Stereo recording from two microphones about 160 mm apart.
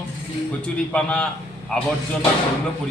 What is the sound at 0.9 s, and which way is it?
Speech, 10° left (ahead or behind).